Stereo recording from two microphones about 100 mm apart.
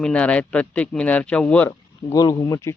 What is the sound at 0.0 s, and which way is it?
Speech, 10° left (ahead or behind).